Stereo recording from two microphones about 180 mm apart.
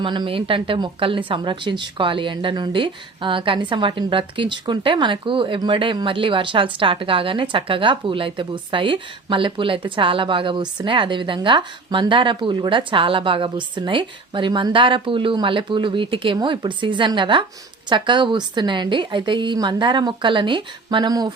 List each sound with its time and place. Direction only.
0.0 s a woman's voice: 25° right (ahead or behind)